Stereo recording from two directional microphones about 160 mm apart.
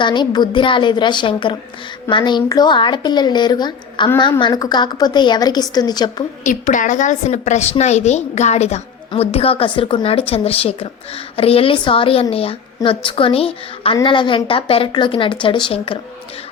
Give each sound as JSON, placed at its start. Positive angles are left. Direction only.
{"t": 0.0, "sound": "a woman's voice", "side_deg": 30}
{"t": 6.4, "sound": "a woman's voice", "side_deg": 55}